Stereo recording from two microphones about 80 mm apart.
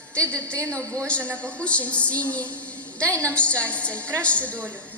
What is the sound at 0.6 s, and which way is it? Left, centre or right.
Speech, right.